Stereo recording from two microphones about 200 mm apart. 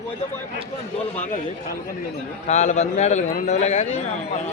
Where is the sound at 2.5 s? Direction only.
35° left (ahead or behind).